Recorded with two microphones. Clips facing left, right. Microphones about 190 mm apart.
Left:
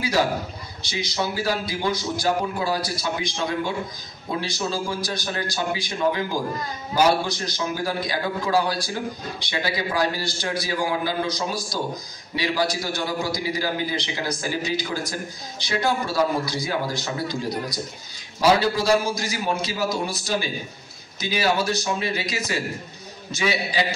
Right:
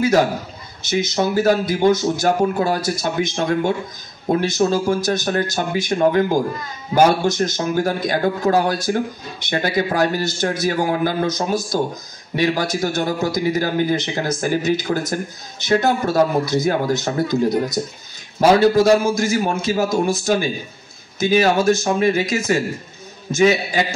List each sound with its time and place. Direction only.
0.8 s speech: 50° right (ahead or behind)
18.4 s speech: 50° right (ahead or behind)